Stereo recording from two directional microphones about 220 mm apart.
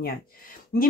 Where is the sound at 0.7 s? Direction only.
40° left (ahead or behind).